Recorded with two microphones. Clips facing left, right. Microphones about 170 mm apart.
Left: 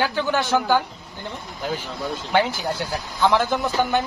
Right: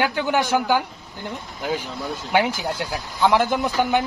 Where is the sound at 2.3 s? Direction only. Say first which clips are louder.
Even; 10° right (ahead or behind).